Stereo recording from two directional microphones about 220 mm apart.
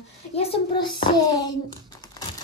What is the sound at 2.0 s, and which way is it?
Typing, 15° left (ahead or behind).